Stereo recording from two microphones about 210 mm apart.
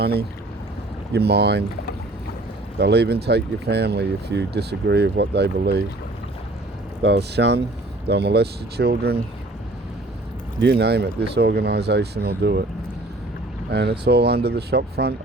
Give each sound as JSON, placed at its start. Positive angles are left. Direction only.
{"t": 0.0, "sound": "speech", "side_deg": -50}
{"t": 2.7, "sound": "speech", "side_deg": -50}
{"t": 7.0, "sound": "speech", "side_deg": -55}
{"t": 10.6, "sound": "speech", "side_deg": -50}
{"t": 13.7, "sound": "speech", "side_deg": -50}